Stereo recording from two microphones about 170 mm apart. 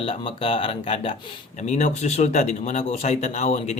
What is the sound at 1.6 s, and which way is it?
Speech, 45° left (ahead or behind).